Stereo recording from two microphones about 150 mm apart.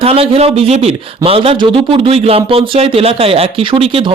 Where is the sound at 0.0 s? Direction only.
40° right (ahead or behind).